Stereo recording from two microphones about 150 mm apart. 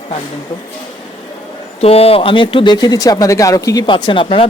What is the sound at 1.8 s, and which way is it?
Speech, 40° left (ahead or behind).